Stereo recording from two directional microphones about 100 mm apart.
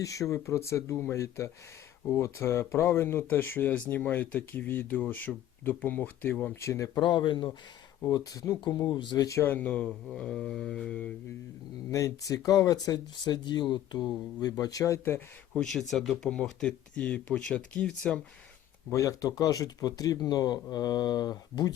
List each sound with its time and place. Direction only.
0.0 s speech: 35° left (ahead or behind)
6.6 s speech: 30° left (ahead or behind)
7.0 s speech: 50° left (ahead or behind)
8.1 s speech: 40° left (ahead or behind)
9.0 s speech: 50° left (ahead or behind)
9.2 s speech: 30° left (ahead or behind)
9.5 s speech: 15° left (ahead or behind)
11.9 s speech: 35° left (ahead or behind)
15.5 s speech: 5° left (ahead or behind)
18.9 s speech: 35° left (ahead or behind)